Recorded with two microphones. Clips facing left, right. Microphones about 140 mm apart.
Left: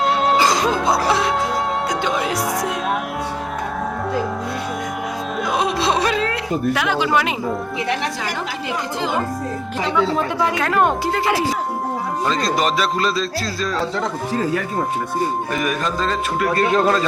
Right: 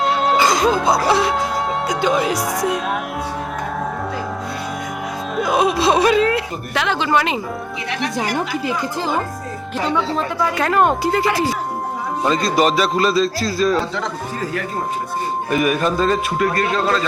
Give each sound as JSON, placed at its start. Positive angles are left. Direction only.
{"t": 0.0, "sound": "music", "side_deg": 0}
{"t": 1.9, "sound": "speech", "side_deg": 0}
{"t": 5.4, "sound": "whimper", "side_deg": -5}
{"t": 6.7, "sound": "speech", "side_deg": 5}
{"t": 10.5, "sound": "speech", "side_deg": 0}
{"t": 15.5, "sound": "speech", "side_deg": -10}
{"t": 16.6, "sound": "speech", "side_deg": 20}